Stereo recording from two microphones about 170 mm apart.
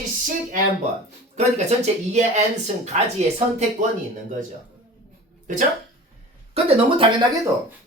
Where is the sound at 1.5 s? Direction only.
40° right (ahead or behind).